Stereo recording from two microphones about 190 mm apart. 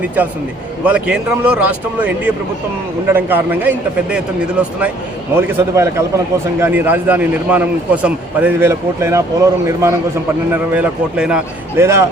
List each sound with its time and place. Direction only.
0.9 s a man's voice: 5° right (ahead or behind)